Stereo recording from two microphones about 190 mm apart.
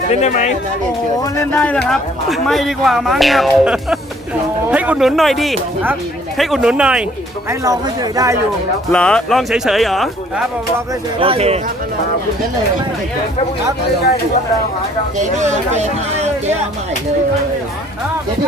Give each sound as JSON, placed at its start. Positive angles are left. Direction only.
{"t": 0.1, "sound": "speech", "side_deg": 40}
{"t": 1.2, "sound": "speech", "side_deg": 10}
{"t": 7.6, "sound": "speech", "side_deg": -20}
{"t": 8.9, "sound": "speech", "side_deg": 5}
{"t": 11.2, "sound": "speech", "side_deg": -30}
{"t": 15.4, "sound": "speech", "side_deg": -35}